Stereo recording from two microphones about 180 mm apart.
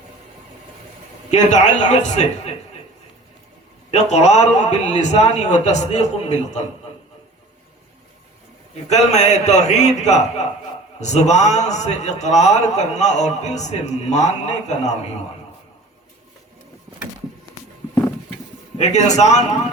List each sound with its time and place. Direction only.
1.3 s a man's voice: 40° left (ahead or behind)
3.9 s a man's voice: 40° left (ahead or behind)
8.9 s a man's voice: 40° left (ahead or behind)
18.8 s a man's voice: 40° left (ahead or behind)